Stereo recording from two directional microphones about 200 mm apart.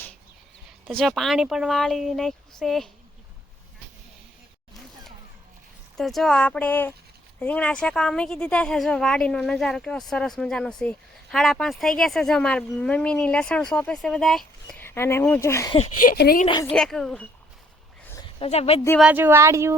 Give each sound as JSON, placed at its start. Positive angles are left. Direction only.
{"t": 0.9, "sound": "speech", "side_deg": 0}
{"t": 6.0, "sound": "speech", "side_deg": 0}
{"t": 16.0, "sound": "speech", "side_deg": 45}
{"t": 16.5, "sound": "speech", "side_deg": 25}
{"t": 16.7, "sound": "speech", "side_deg": 5}
{"t": 18.3, "sound": "speech", "side_deg": 30}
{"t": 18.9, "sound": "speech", "side_deg": -5}